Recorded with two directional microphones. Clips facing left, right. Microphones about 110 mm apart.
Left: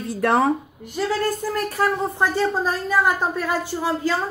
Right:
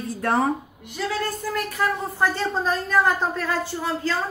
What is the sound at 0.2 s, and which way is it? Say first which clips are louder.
Speech: left 3 dB; 90° left.